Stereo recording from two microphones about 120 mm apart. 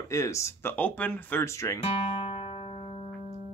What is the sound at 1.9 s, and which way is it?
Music, 55° left (ahead or behind).